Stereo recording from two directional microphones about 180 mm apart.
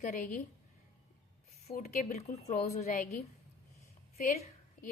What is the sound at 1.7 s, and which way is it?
A woman's voice, 50° left (ahead or behind).